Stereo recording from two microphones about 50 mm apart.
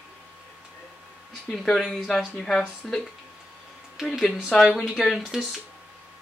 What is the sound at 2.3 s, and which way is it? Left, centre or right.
Speech, centre.